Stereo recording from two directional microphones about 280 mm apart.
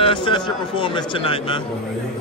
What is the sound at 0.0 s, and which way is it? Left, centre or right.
Speech, centre.